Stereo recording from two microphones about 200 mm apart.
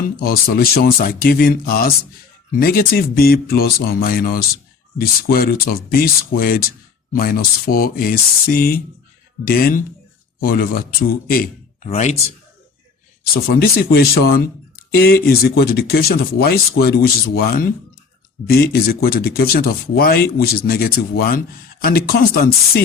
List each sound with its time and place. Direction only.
0.0 s speech: 45° left (ahead or behind)
11.3 s a sound: 45° left (ahead or behind)
11.9 s speech: 35° left (ahead or behind)
13.3 s speech: 50° left (ahead or behind)